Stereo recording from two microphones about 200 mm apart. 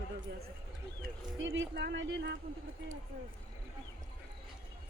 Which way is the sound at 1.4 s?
65° right (ahead or behind).